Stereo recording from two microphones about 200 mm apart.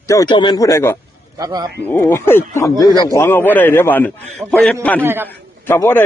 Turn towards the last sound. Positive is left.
turn(degrees=10)  # may be behind; listen again after turning